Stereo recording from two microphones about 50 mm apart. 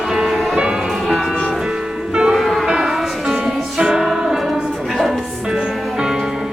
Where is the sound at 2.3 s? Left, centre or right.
Centre.